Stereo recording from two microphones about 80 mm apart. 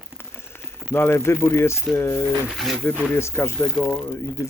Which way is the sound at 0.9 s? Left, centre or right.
Left.